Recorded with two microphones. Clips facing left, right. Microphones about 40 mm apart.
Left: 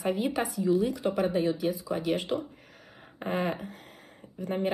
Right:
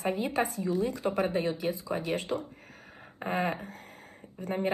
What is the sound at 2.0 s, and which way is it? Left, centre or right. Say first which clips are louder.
Speech: left 3 dB; left.